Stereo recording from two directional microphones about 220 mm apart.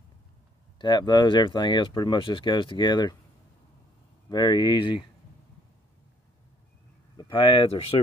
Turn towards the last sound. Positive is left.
turn(degrees=25)  # may be behind; listen again after turning